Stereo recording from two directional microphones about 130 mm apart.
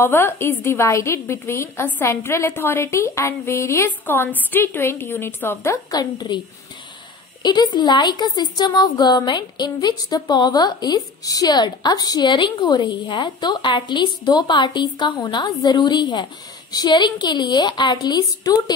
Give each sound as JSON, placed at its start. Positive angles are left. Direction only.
{"t": 0.0, "sound": "a woman's voice", "side_deg": 20}
{"t": 7.4, "sound": "a woman's voice", "side_deg": 35}